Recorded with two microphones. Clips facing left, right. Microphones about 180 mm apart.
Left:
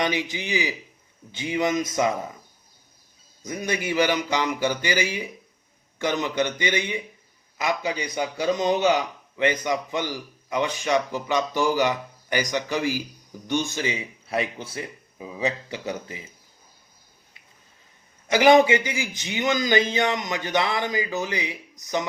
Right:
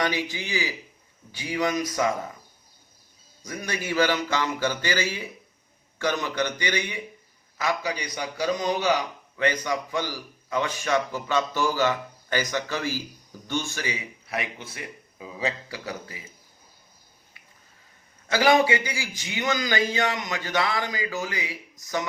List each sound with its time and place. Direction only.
0.0 s a man's voice: 20° left (ahead or behind)
3.4 s a man's voice: 20° left (ahead or behind)
15.4 s a man's voice: 20° left (ahead or behind)
18.3 s a man's voice: 20° left (ahead or behind)